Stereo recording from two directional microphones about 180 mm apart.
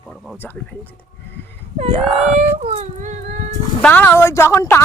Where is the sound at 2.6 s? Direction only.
35° right (ahead or behind).